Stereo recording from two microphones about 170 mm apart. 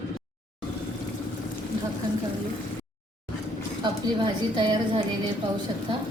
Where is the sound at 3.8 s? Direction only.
30° right (ahead or behind).